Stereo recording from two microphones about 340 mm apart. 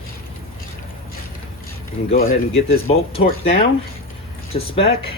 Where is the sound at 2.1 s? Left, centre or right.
Left.